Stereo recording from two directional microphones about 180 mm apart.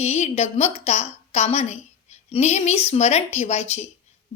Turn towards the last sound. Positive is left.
turn(degrees=35)  # may be behind; listen again after turning